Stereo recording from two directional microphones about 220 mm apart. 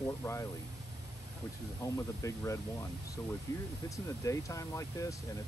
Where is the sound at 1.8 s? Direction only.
15° left (ahead or behind).